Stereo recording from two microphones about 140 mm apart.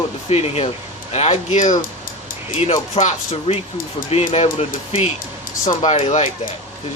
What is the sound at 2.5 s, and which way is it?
A man's voice, 45° left (ahead or behind).